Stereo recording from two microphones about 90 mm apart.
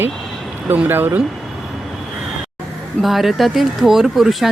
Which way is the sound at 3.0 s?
Centre (ahead or behind).